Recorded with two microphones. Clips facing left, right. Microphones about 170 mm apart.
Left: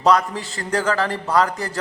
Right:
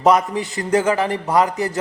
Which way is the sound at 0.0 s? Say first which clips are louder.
Right 2 dB; 20° right (ahead or behind).